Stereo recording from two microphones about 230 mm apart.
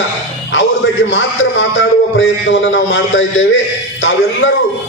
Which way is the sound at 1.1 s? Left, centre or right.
Left.